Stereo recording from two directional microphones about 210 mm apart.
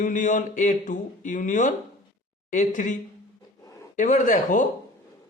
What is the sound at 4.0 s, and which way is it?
Speech, 40° left (ahead or behind).